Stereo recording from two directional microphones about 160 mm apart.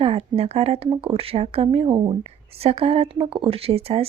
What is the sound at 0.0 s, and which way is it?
Speech, 35° right (ahead or behind).